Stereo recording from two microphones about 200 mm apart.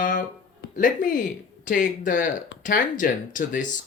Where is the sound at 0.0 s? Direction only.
40° left (ahead or behind).